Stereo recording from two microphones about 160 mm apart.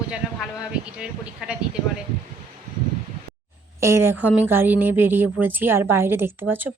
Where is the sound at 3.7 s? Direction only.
15° right (ahead or behind).